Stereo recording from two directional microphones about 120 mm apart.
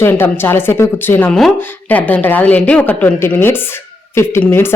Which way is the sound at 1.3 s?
5° left (ahead or behind).